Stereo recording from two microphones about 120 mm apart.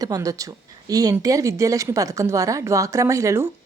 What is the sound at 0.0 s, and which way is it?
Speech, 30° right (ahead or behind).